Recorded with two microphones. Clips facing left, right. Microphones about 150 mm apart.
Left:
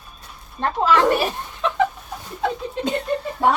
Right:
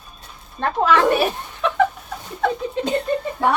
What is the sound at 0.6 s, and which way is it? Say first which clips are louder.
Speech: right 1 dB; 55° right (ahead or behind).